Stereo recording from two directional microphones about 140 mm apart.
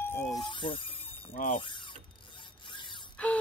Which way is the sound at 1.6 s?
35° left (ahead or behind).